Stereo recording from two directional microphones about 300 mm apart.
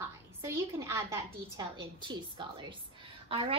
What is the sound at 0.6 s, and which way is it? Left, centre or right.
A woman's voice, centre.